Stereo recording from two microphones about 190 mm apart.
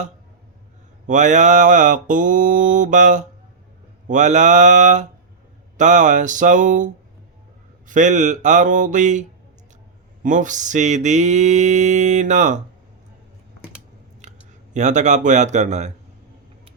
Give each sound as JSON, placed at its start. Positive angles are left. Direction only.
{"t": 1.0, "sound": "mantra", "side_deg": -40}
{"t": 10.2, "sound": "mantra", "side_deg": -40}
{"t": 14.2, "sound": "speech", "side_deg": -40}